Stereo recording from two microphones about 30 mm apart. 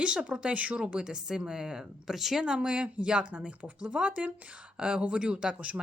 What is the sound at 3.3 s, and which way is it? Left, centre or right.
A woman's voice, right.